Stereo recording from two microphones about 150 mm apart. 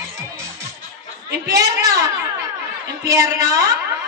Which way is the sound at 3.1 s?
20° right (ahead or behind).